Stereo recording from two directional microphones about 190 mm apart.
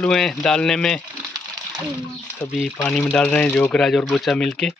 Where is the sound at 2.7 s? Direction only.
10° left (ahead or behind).